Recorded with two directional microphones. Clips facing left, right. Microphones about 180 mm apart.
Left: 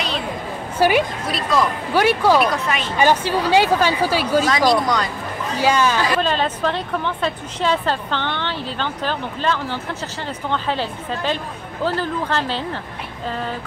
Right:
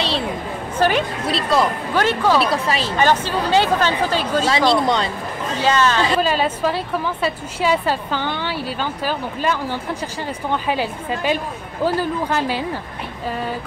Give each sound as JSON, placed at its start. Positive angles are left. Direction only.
{"t": 0.7, "sound": "speech", "side_deg": 10}
{"t": 1.2, "sound": "speech", "side_deg": -30}
{"t": 2.0, "sound": "speech", "side_deg": 10}
{"t": 2.5, "sound": "speech", "side_deg": -30}
{"t": 3.0, "sound": "speech", "side_deg": 10}
{"t": 4.5, "sound": "speech", "side_deg": -25}
{"t": 5.6, "sound": "speech", "side_deg": 10}
{"t": 6.2, "sound": "a woman's voice", "side_deg": -5}